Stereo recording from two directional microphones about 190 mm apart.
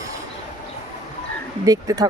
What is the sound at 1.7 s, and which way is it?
Speech, 20° right (ahead or behind).